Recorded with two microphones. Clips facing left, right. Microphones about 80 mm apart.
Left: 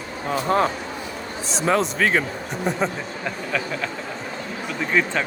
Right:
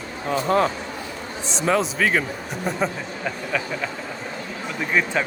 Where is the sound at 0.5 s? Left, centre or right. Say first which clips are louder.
Even; left.